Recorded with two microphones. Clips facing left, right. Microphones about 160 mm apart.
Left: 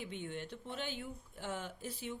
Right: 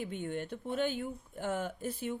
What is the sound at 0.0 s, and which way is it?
Speech, 50° right (ahead or behind).